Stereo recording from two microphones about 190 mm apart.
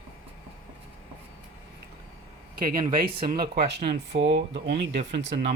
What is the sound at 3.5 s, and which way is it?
Speech, 55° right (ahead or behind).